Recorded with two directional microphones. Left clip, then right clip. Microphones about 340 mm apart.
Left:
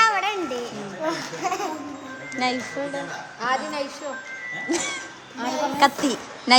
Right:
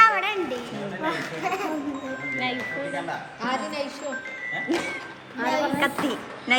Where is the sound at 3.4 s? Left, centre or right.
Left.